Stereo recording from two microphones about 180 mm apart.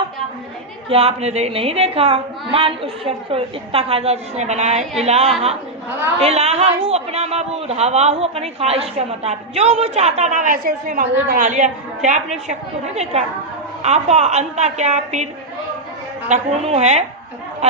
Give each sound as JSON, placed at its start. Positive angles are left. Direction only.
{"t": 0.9, "sound": "a man's voice", "side_deg": -35}
{"t": 13.8, "sound": "a man's voice", "side_deg": -40}
{"t": 16.3, "sound": "a man's voice", "side_deg": -40}